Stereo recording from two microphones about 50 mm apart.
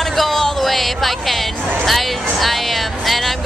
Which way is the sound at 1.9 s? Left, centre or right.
Centre.